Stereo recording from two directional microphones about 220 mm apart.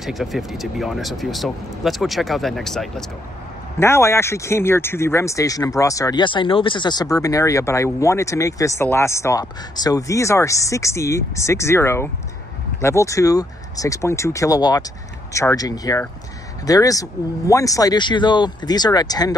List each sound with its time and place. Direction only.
0.0 s speech: centre (ahead or behind)
3.8 s speech: 10° left (ahead or behind)